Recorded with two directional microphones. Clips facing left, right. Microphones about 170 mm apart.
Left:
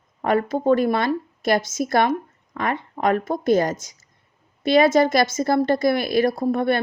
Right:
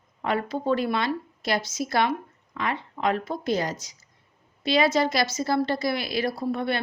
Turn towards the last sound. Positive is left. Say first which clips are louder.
# left 6 dB
turn(degrees=50)  # may be behind; listen again after turning